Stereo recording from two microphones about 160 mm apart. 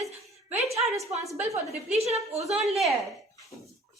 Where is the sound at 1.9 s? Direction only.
40° right (ahead or behind).